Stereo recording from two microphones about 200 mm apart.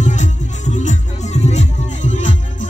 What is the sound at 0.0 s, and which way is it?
Music, 35° left (ahead or behind).